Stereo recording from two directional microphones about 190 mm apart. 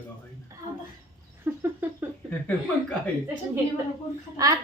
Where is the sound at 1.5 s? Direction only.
10° right (ahead or behind).